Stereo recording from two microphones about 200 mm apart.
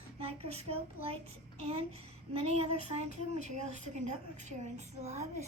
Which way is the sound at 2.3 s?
30° right (ahead or behind).